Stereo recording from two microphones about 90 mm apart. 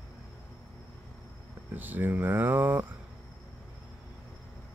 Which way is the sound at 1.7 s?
20° right (ahead or behind).